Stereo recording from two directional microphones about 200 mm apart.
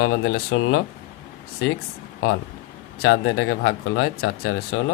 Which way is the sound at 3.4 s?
90° left.